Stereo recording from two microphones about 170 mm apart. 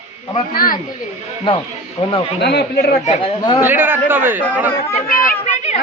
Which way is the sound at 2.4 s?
75° left (ahead or behind).